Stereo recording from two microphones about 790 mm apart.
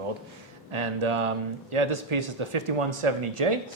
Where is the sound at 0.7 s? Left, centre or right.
Right.